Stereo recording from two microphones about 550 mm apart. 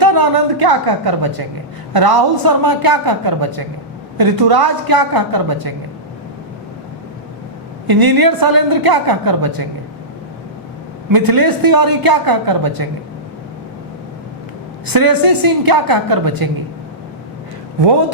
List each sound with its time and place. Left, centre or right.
0.0 s a woman's voice: right
7.9 s a woman's voice: right
11.1 s a woman's voice: right
14.9 s a woman's voice: right